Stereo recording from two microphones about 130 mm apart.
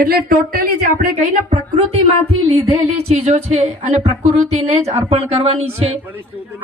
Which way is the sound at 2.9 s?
55° right (ahead or behind).